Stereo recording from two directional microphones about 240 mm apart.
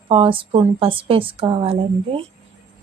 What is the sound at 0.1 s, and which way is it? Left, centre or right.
A woman's voice, right.